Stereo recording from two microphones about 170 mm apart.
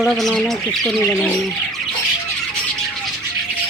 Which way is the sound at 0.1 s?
Centre (ahead or behind).